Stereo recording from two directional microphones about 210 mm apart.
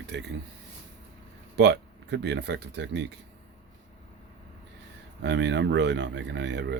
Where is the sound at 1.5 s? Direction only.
55° right (ahead or behind).